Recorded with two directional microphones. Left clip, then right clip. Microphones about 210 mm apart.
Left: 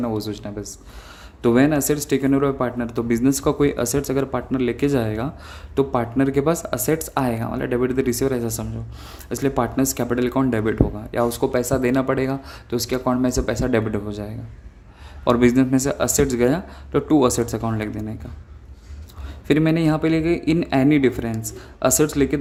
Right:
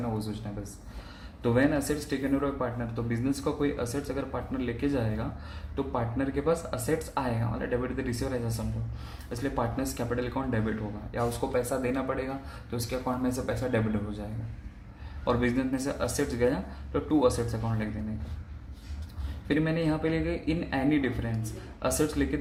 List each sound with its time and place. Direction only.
0.4 s speech: 50° left (ahead or behind)
19.5 s speech: 55° left (ahead or behind)